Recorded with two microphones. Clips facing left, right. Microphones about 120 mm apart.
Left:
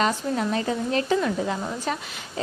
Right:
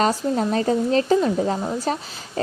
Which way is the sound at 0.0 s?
35° right (ahead or behind).